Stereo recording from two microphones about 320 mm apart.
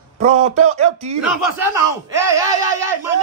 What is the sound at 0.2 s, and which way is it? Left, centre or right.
Speech, right.